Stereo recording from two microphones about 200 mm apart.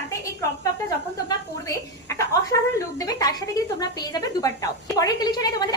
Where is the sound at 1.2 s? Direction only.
15° left (ahead or behind).